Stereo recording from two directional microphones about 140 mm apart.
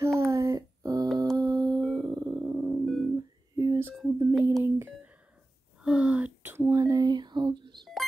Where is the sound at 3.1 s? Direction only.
25° right (ahead or behind).